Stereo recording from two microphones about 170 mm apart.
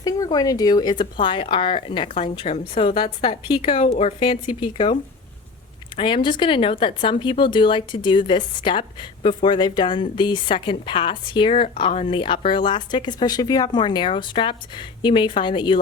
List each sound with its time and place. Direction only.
0.0 s a woman's voice: 20° left (ahead or behind)
6.0 s speech: 30° left (ahead or behind)